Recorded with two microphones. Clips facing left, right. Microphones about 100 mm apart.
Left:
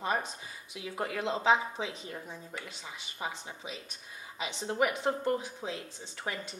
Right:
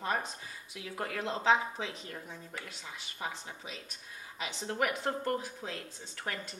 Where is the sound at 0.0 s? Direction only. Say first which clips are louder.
Left 2 dB; 15° left (ahead or behind).